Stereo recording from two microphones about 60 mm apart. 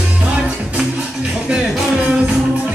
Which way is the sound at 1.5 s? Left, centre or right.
Centre.